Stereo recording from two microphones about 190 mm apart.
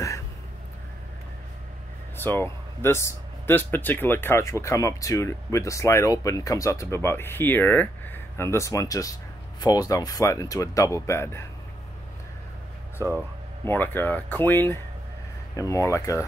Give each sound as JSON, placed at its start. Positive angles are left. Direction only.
{"t": 2.1, "sound": "speech", "side_deg": 10}
{"t": 13.0, "sound": "speech", "side_deg": 15}